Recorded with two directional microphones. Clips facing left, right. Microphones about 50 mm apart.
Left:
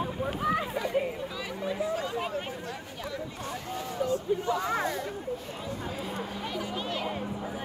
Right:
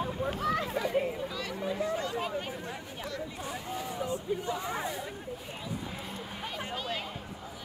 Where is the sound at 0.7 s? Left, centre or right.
Centre.